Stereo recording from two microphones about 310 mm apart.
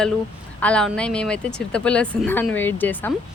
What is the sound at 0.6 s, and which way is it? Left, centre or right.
A woman's voice, centre.